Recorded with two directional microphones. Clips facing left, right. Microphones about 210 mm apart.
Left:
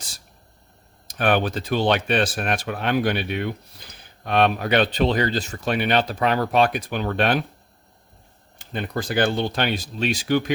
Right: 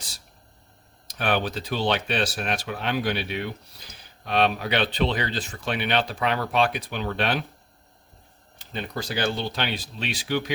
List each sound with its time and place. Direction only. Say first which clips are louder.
1.0 s speech: left 5 dB; 50° left (ahead or behind)
8.5 s speech: left 4 dB; 50° left (ahead or behind)